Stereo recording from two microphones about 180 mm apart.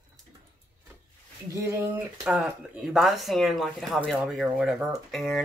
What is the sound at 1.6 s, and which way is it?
Speech, 15° right (ahead or behind).